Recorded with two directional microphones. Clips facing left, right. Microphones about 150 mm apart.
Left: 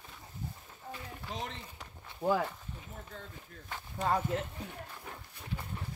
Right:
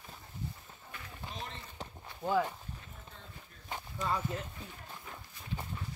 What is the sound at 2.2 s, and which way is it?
Speech, 70° left (ahead or behind).